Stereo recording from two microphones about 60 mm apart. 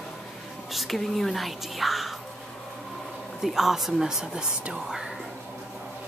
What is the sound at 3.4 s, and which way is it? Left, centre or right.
Speech, centre.